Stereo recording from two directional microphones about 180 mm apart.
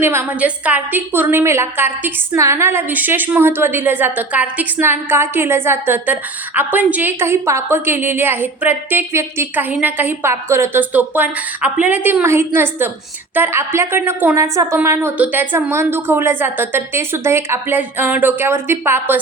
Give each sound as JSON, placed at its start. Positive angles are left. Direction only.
{"t": 0.0, "sound": "a woman's voice", "side_deg": -15}